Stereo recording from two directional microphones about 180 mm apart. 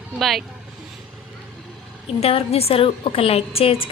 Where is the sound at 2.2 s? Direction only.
35° left (ahead or behind).